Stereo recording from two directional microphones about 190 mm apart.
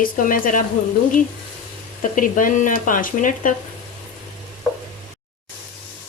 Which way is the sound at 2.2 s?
45° left (ahead or behind).